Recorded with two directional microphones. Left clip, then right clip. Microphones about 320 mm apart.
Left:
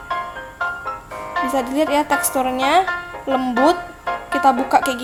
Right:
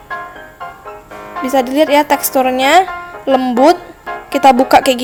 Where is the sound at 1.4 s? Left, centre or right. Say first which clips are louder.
Right 9 dB; centre.